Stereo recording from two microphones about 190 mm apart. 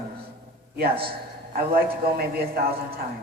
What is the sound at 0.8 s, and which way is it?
A man's voice, 55° right (ahead or behind).